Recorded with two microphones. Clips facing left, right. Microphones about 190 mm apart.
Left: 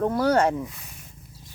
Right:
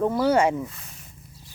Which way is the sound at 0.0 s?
5° right (ahead or behind).